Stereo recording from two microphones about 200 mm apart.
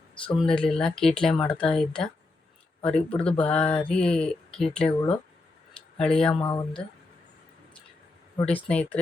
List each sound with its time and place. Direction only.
0.3 s speech: 5° left (ahead or behind)
6.4 s speech: 15° left (ahead or behind)
8.4 s speech: 5° left (ahead or behind)